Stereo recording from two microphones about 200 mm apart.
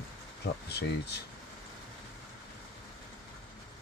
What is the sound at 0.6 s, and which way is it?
Speech, 55° left (ahead or behind).